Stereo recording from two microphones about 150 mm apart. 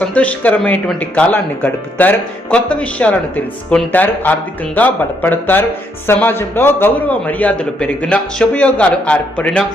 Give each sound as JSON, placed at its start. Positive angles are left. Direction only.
{"t": 0.0, "sound": "speech", "side_deg": 10}